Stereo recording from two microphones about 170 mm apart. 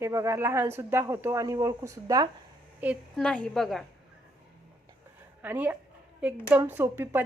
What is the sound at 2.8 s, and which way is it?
Speech, 10° right (ahead or behind).